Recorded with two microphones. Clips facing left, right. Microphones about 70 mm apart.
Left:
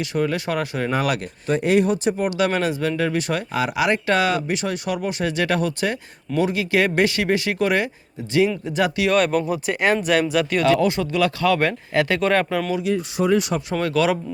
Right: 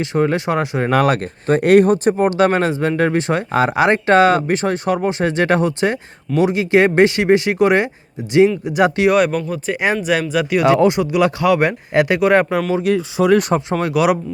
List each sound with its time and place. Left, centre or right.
0.0 s speech: right
1.0 s speech: right; by 8.9 s centre
9.1 s speech: centre
10.8 s speech: right
12.8 s speech: right
13.7 s speech: centre